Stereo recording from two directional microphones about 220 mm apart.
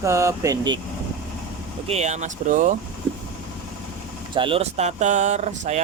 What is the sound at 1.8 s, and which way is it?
Speech, 30° right (ahead or behind).